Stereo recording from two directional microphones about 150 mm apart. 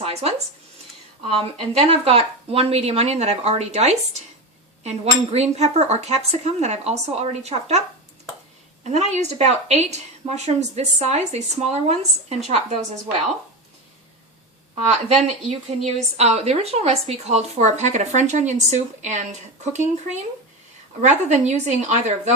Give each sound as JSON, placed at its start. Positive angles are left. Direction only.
{"t": 0.0, "sound": "speech", "side_deg": -40}
{"t": 8.8, "sound": "speech", "side_deg": -50}
{"t": 14.8, "sound": "speech", "side_deg": -45}